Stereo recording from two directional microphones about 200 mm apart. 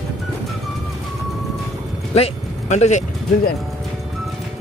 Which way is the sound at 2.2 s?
35° left (ahead or behind).